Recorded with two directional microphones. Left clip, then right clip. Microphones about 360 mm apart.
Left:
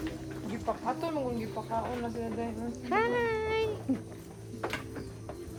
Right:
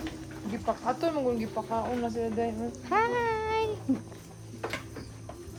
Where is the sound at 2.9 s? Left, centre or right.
Centre.